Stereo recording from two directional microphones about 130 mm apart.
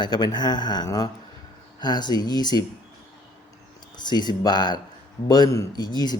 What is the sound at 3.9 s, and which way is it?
A man's voice, 35° left (ahead or behind).